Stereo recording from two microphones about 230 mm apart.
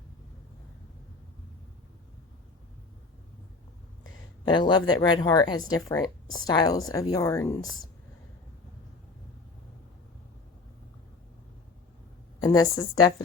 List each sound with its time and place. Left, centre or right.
4.4 s speech: centre
12.4 s speech: centre